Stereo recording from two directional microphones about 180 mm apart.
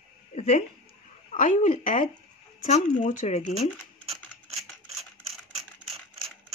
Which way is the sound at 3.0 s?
40° left (ahead or behind).